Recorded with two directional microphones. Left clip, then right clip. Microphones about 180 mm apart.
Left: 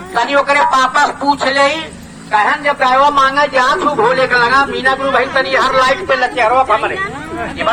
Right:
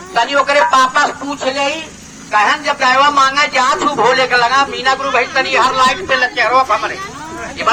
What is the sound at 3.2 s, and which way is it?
A man's voice, 40° right (ahead or behind).